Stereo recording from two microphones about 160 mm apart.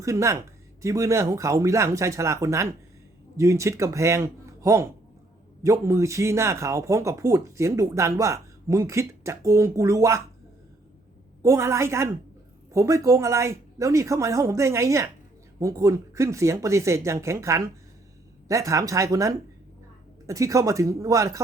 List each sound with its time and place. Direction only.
0.0 s speech: 20° right (ahead or behind)
11.4 s a woman's voice: 20° right (ahead or behind)